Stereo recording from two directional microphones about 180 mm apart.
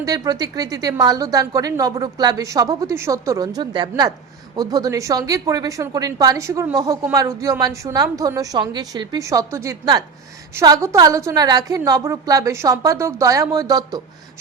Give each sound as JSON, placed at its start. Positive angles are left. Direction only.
{"t": 0.0, "sound": "a woman's voice", "side_deg": -20}